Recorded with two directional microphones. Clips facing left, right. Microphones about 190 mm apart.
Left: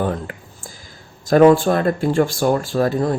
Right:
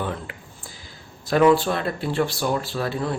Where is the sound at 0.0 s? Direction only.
45° left (ahead or behind).